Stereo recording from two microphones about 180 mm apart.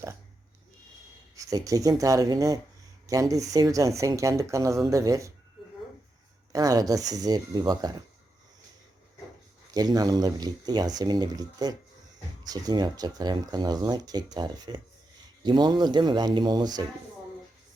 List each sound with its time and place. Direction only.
1.4 s speech: 20° right (ahead or behind)
6.5 s speech: 20° right (ahead or behind)
9.7 s speech: 20° right (ahead or behind)